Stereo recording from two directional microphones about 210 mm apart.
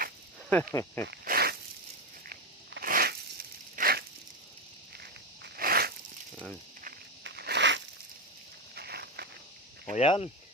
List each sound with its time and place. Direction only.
0.5 s speech: 15° left (ahead or behind)
1.0 s snake: 45° right (ahead or behind)
2.2 s a sound: 45° right (ahead or behind)
5.4 s biting: 45° right (ahead or behind)
7.3 s a sound: 50° right (ahead or behind)
8.7 s walk: 50° right (ahead or behind)
9.9 s speech: 30° left (ahead or behind)